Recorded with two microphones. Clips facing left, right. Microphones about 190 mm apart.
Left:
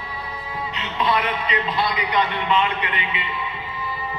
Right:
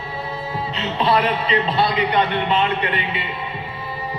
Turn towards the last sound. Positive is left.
turn(degrees=-35)  # may be behind; listen again after turning